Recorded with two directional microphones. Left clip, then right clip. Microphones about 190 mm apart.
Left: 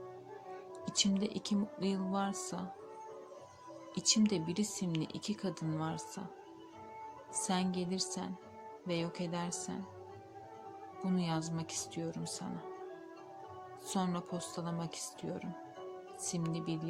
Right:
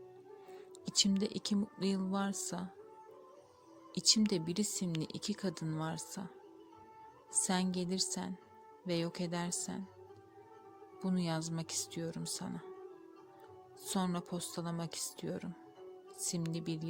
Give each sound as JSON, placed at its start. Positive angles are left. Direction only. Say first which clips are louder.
{"t": 0.9, "sound": "speech", "louder": "right 1 dB", "side_deg": -35}
{"t": 3.9, "sound": "speech", "louder": "right 1 dB", "side_deg": -35}
{"t": 7.4, "sound": "speech", "louder": "left 1 dB", "side_deg": -40}
{"t": 11.0, "sound": "speech", "louder": "left 1 dB", "side_deg": -35}
{"t": 13.8, "sound": "speech", "louder": "even", "side_deg": -35}